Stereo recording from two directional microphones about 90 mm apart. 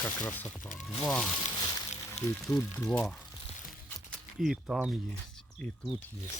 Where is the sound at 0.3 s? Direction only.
20° left (ahead or behind).